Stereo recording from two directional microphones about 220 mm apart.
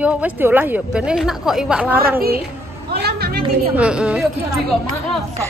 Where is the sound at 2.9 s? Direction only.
45° right (ahead or behind).